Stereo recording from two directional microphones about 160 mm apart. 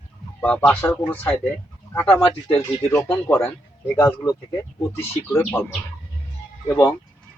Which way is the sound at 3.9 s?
20° left (ahead or behind).